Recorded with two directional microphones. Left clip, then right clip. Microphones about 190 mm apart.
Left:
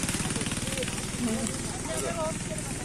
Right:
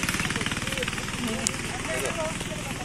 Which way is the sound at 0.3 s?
25° right (ahead or behind).